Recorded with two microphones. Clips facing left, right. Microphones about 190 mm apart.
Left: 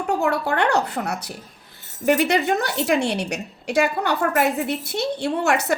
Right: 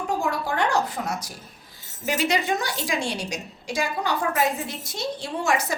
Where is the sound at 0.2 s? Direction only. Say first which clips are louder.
Left 4 dB; 65° left (ahead or behind).